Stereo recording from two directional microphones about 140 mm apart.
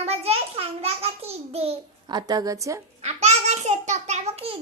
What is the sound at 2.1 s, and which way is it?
Speech, 30° right (ahead or behind).